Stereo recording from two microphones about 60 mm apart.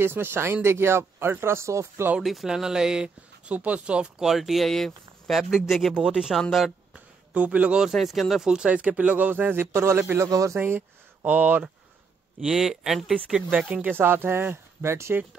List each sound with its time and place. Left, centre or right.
0.0 s a man's voice: right
2.2 s speech: centre
3.4 s speech: right
4.2 s speech: centre
5.4 s speech: centre
6.9 s a sound: right
7.9 s speech: centre
8.6 s a man's voice: right
12.4 s speech: centre
13.5 s speech: right
13.9 s speech: right